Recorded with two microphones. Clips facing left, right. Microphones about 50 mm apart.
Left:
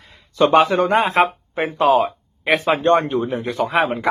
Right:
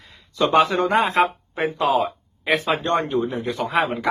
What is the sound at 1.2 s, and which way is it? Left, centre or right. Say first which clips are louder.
Speech: left 3 dB; left.